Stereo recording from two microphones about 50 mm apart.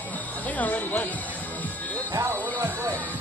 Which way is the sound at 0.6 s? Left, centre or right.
Left.